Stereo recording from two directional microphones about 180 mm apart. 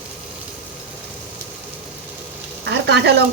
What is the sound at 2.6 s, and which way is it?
Speech, 75° right (ahead or behind).